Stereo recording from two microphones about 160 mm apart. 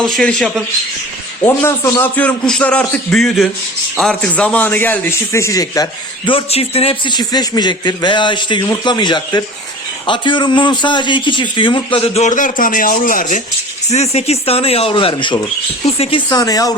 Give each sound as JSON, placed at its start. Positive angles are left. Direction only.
{"t": 0.0, "sound": "a man's voice", "side_deg": 5}
{"t": 13.9, "sound": "a man's voice", "side_deg": 40}